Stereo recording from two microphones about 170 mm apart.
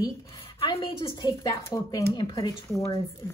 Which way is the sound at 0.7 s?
30° left (ahead or behind).